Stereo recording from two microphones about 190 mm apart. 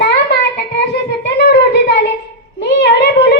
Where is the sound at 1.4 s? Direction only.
60° left (ahead or behind).